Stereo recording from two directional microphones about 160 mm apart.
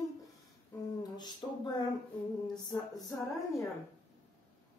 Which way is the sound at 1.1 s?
25° left (ahead or behind).